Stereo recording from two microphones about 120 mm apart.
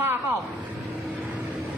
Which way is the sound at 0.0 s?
20° right (ahead or behind).